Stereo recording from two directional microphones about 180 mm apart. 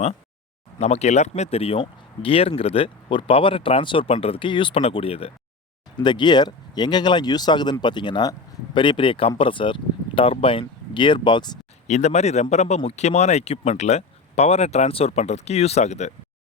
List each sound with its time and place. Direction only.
0.8 s speech: 35° left (ahead or behind)
11.9 s speech: 40° left (ahead or behind)